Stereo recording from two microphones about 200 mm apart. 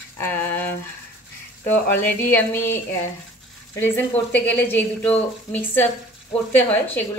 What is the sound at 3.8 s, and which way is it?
A woman's voice, 10° left (ahead or behind).